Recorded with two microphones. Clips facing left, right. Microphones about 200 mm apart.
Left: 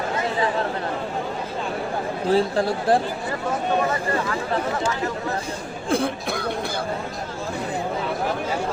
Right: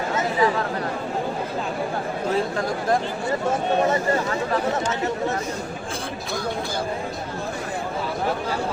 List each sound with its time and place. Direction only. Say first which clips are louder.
2.3 s speech: left 5 dB; 30° left (ahead or behind)
5.9 s chatter: left 11 dB; 55° left (ahead or behind)